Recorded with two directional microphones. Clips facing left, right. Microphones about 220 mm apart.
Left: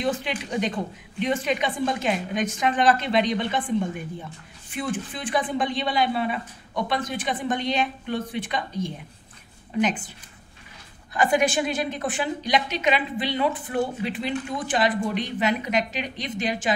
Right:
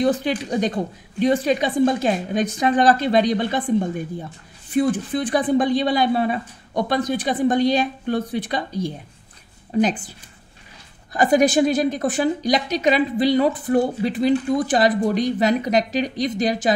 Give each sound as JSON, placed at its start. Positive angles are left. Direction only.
{"t": 0.0, "sound": "a woman's voice", "side_deg": -40}
{"t": 11.1, "sound": "a woman's voice", "side_deg": -40}